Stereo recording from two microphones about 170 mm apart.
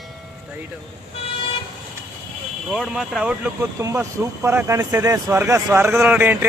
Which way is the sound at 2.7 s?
Centre (ahead or behind).